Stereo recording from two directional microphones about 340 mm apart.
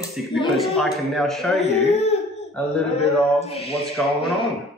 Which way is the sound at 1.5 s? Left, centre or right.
Centre.